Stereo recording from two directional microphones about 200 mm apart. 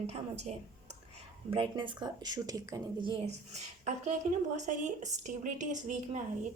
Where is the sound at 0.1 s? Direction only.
35° right (ahead or behind).